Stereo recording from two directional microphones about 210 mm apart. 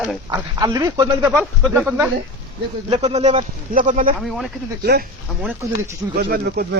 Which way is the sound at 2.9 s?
30° right (ahead or behind).